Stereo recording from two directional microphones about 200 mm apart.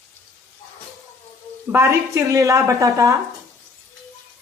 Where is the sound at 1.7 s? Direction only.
15° right (ahead or behind).